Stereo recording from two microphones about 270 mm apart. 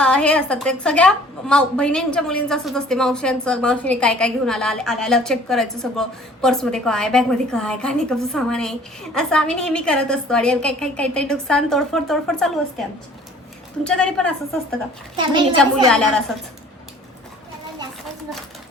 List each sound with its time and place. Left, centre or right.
0.0 s a woman's voice: centre
13.8 s a woman's voice: centre
15.2 s a woman's voice: centre
15.5 s a woman's voice: centre